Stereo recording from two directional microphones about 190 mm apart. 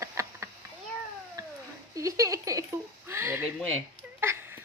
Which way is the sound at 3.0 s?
15° right (ahead or behind).